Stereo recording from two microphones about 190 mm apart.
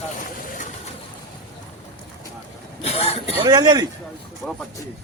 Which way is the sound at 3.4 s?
20° right (ahead or behind).